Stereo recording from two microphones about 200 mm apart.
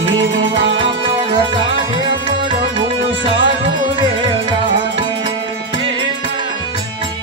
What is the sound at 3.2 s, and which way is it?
Music, 25° right (ahead or behind).